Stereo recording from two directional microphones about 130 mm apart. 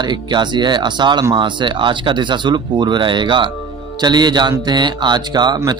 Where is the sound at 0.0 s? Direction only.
35° right (ahead or behind).